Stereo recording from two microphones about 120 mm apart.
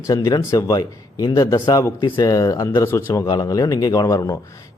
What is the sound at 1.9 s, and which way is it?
A man's voice, 40° left (ahead or behind).